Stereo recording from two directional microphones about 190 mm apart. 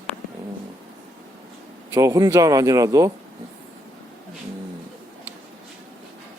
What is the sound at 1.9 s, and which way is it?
Speech, 20° right (ahead or behind).